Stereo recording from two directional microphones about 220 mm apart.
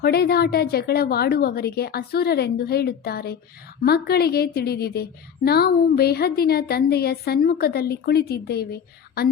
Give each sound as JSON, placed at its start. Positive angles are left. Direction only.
{"t": 0.0, "sound": "a woman's voice", "side_deg": 45}